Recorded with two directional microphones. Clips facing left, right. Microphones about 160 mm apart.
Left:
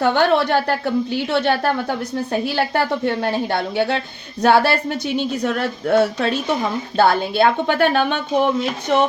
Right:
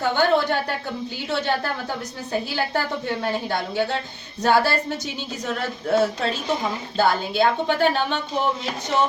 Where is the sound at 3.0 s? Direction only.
65° left (ahead or behind).